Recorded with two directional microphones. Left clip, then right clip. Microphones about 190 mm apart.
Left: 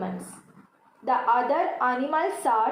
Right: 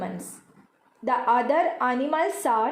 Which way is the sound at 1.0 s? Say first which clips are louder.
Right 1 dB; 50° right (ahead or behind).